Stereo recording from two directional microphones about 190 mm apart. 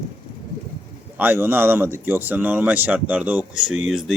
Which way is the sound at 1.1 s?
10° right (ahead or behind).